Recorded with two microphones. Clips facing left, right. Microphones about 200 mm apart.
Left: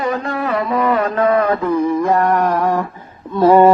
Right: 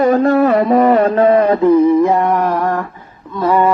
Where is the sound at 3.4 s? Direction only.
30° left (ahead or behind).